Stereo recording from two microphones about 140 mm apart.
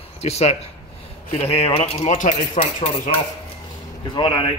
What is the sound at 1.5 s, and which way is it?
Speech, 45° left (ahead or behind).